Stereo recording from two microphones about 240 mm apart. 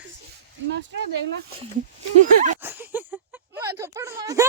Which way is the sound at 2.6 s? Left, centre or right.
Centre.